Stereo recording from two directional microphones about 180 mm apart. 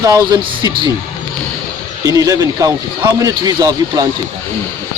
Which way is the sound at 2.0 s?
20° right (ahead or behind).